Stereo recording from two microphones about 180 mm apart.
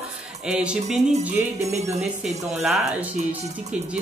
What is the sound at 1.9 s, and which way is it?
Speech, centre (ahead or behind).